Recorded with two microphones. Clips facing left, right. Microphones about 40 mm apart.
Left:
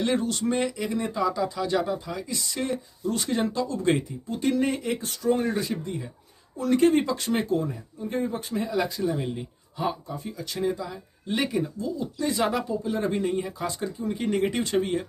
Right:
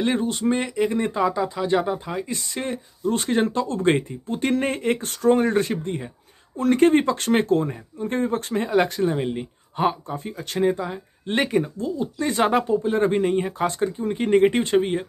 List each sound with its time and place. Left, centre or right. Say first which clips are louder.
0.0 s speech: right 3 dB; right
1.3 s speech: right 4 dB; right